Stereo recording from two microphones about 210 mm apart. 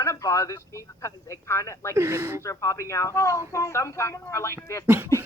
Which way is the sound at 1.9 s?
15° right (ahead or behind).